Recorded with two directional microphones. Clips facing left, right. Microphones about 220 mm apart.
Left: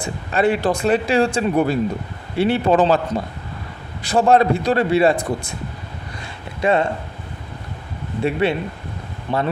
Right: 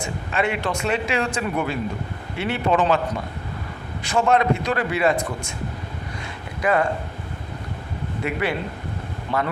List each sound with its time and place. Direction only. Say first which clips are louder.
0.0 s speech: left 5 dB; 35° left (ahead or behind)
6.6 s speech: left 3 dB; 25° left (ahead or behind)
8.2 s a man's voice: left 6 dB; 25° left (ahead or behind)